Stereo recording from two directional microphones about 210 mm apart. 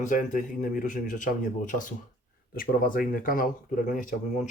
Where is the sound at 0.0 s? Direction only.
35° left (ahead or behind).